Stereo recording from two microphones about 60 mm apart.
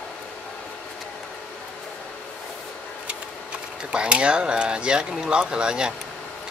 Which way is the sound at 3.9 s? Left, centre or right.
Centre.